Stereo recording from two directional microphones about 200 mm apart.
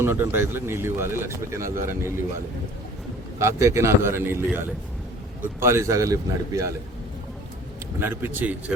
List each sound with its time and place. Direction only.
0.0 s speech: 10° right (ahead or behind)
3.3 s speech: 15° right (ahead or behind)
7.9 s speech: 10° right (ahead or behind)